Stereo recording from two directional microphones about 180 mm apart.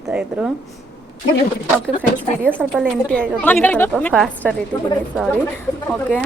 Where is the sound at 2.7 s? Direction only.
5° left (ahead or behind).